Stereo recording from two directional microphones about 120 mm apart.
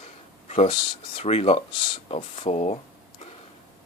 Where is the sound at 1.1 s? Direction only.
60° left (ahead or behind).